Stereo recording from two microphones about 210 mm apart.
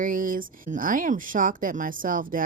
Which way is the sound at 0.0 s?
40° right (ahead or behind).